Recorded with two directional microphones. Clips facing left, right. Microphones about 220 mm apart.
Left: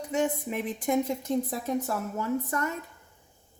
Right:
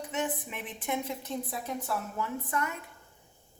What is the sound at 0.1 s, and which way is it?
A woman's voice, 40° left (ahead or behind).